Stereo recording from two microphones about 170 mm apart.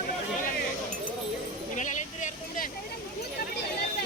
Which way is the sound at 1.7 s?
50° left (ahead or behind).